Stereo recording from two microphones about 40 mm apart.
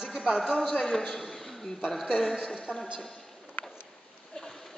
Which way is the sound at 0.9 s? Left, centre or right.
Centre.